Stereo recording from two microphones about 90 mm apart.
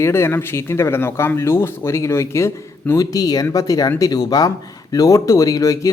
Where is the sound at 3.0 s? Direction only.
45° left (ahead or behind).